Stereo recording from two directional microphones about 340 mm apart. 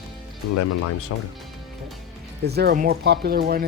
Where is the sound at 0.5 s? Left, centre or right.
Left.